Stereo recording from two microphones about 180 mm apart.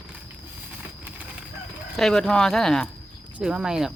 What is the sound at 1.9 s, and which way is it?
Speech, 5° left (ahead or behind).